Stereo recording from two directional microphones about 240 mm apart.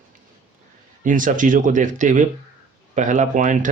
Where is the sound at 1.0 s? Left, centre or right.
Right.